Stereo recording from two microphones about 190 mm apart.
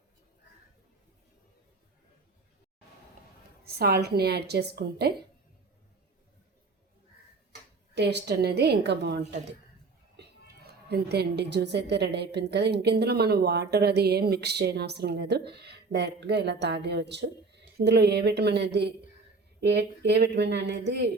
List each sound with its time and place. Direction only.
3.6 s a woman's voice: 55° right (ahead or behind)
7.9 s a woman's voice: 60° right (ahead or behind)
10.8 s a woman's voice: 60° right (ahead or behind)